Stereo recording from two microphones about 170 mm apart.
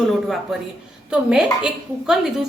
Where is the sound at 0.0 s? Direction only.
Centre (ahead or behind).